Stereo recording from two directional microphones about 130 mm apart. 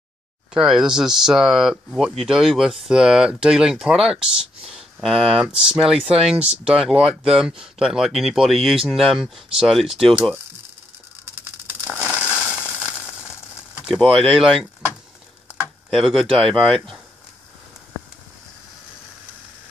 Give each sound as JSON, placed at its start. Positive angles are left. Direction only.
{"t": 0.5, "sound": "speech", "side_deg": -5}
{"t": 11.9, "sound": "crushing", "side_deg": -10}
{"t": 12.6, "sound": "a sound", "side_deg": -5}
{"t": 13.8, "sound": "speech", "side_deg": 0}
{"t": 15.9, "sound": "speech", "side_deg": 0}